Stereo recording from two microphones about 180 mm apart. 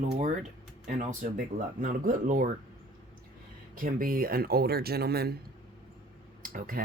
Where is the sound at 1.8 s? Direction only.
50° right (ahead or behind).